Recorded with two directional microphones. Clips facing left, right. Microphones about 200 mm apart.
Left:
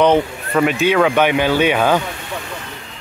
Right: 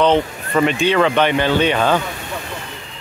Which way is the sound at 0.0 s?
10° left (ahead or behind).